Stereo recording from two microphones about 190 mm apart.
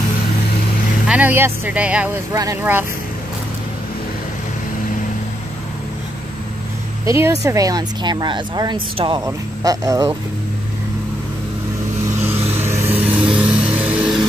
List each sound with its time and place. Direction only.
1.0 s speech: 10° right (ahead or behind)
7.1 s speech: 15° right (ahead or behind)
12.2 s vehicle: 10° right (ahead or behind)